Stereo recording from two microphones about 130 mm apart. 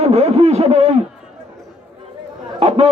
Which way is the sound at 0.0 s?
55° right (ahead or behind).